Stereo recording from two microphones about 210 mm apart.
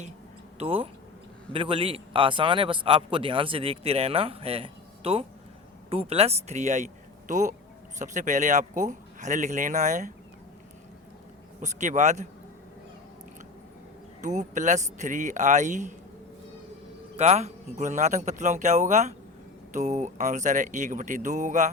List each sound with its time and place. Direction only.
0.6 s a man's voice: 25° right (ahead or behind)
11.6 s a man's voice: 35° right (ahead or behind)
14.2 s a man's voice: 35° right (ahead or behind)
17.2 s a man's voice: 30° right (ahead or behind)